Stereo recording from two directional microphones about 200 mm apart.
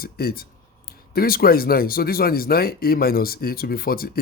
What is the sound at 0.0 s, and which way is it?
Speech, 50° left (ahead or behind).